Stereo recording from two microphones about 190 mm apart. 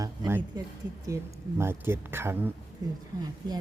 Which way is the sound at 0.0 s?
15° right (ahead or behind).